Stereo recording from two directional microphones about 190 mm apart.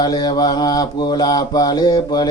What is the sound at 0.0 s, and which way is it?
Mantra, 20° left (ahead or behind).